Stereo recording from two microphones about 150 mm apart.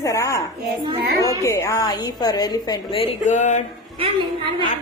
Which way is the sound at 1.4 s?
20° left (ahead or behind).